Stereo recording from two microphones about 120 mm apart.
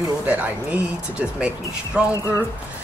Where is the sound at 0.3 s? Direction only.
10° right (ahead or behind).